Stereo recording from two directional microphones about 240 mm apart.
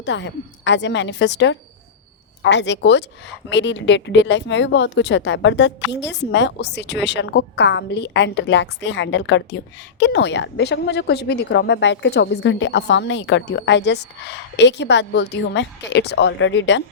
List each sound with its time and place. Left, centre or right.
0.0 s a woman's voice: left